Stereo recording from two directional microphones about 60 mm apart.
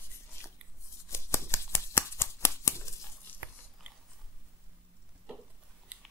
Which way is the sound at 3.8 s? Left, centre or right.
Centre.